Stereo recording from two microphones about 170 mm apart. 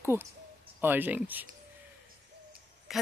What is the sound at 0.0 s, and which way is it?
Speech, 15° right (ahead or behind).